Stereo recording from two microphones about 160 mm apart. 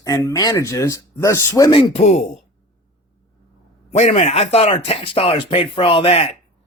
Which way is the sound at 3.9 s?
40° left (ahead or behind).